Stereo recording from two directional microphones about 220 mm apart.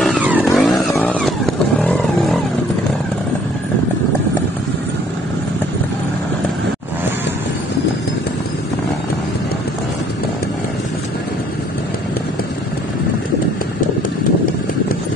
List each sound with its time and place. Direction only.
0.0 s vehicle: 5° right (ahead or behind)
0.7 s vehicle: 10° left (ahead or behind)